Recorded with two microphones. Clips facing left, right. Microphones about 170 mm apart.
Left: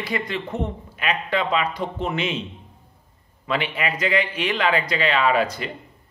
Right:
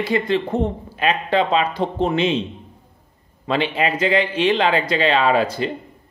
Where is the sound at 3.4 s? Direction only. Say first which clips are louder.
Right 5 dB; 30° right (ahead or behind).